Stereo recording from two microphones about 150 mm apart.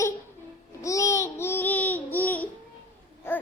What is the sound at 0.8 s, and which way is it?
Babbling, 20° left (ahead or behind).